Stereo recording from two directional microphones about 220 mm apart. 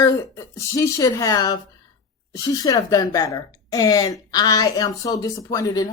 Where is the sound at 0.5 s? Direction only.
15° left (ahead or behind).